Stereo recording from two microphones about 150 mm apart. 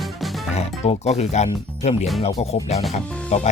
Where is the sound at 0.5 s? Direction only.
45° left (ahead or behind).